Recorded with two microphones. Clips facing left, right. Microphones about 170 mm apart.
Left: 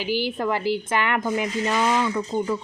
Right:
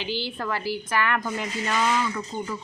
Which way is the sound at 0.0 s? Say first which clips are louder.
Left 6 dB; 15° left (ahead or behind).